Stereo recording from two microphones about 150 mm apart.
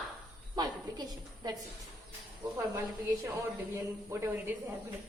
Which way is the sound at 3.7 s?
20° right (ahead or behind).